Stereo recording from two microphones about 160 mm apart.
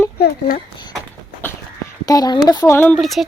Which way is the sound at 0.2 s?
70° left (ahead or behind).